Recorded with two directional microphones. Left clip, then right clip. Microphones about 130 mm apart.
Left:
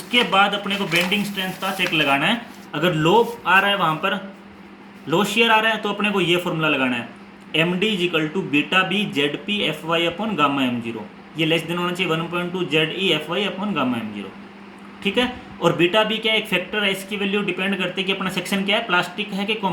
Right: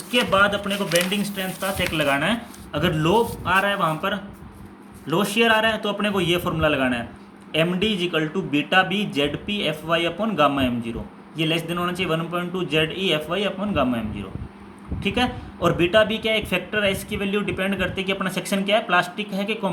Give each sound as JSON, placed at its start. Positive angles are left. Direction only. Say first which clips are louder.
{"t": 0.1, "sound": "speech", "louder": "left 2 dB", "side_deg": -30}
{"t": 15.0, "sound": "speech", "louder": "left 2 dB", "side_deg": -25}